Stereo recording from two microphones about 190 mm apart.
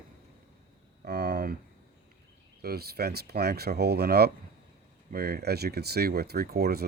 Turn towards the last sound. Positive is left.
turn(degrees=-55)  # may be behind; listen again after turning